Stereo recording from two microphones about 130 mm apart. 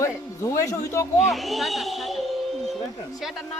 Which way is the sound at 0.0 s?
25° left (ahead or behind).